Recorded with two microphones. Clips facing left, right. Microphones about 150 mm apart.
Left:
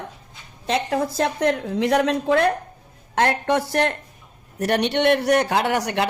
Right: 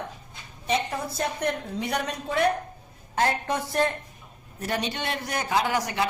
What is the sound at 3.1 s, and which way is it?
A woman's voice, 75° left (ahead or behind).